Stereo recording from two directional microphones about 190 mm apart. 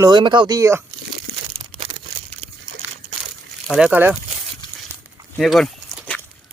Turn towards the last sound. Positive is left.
turn(degrees=0)  # may be behind; listen again after turning